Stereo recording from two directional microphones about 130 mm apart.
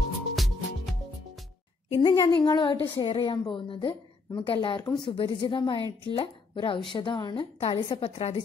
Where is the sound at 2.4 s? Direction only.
35° left (ahead or behind).